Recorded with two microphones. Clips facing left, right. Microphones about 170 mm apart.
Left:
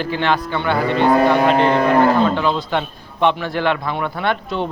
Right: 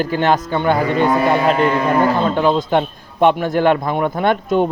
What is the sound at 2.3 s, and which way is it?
A man's voice, 45° right (ahead or behind).